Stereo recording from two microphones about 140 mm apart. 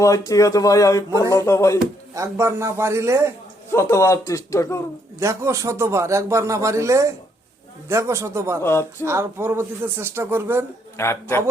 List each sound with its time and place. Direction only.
0.0 s speech: 25° left (ahead or behind)
2.1 s a man's voice: 20° right (ahead or behind)
3.7 s speech: 20° left (ahead or behind)
5.2 s a man's voice: 20° right (ahead or behind)
8.6 s a woman's voice: 15° left (ahead or behind)
9.0 s speech: 20° right (ahead or behind)
10.9 s speech: 20° left (ahead or behind)